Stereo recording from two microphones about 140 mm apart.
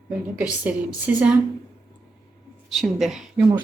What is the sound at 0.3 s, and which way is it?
A woman's voice, 10° right (ahead or behind).